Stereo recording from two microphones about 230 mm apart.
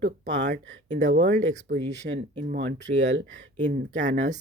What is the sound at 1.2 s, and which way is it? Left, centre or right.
Speech, right.